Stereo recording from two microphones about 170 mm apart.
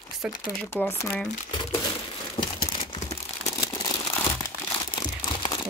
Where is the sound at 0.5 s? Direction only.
10° left (ahead or behind).